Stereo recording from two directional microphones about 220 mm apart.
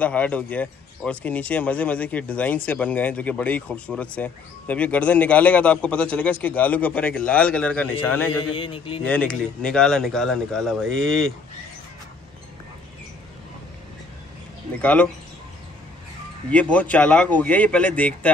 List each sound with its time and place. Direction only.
0.0 s speech: 5° left (ahead or behind)
8.5 s a man's voice: 25° left (ahead or behind)
9.0 s speech: 5° left (ahead or behind)
14.8 s speech: 5° left (ahead or behind)
16.4 s speech: 5° left (ahead or behind)